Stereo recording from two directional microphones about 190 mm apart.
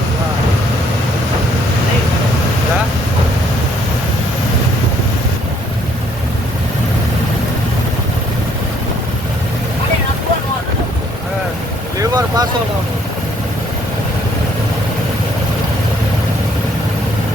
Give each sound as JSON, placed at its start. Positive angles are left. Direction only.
{"t": 11.9, "sound": "vehicle", "side_deg": -20}